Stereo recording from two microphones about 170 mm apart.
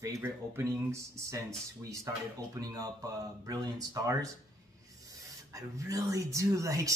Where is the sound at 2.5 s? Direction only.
20° right (ahead or behind).